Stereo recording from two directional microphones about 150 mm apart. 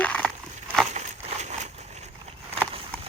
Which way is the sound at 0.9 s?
50° right (ahead or behind).